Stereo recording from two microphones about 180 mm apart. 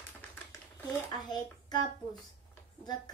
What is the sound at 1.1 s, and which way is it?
Speech, 25° left (ahead or behind).